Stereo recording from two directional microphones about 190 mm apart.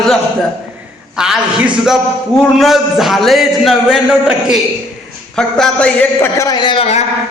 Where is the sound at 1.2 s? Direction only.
5° right (ahead or behind).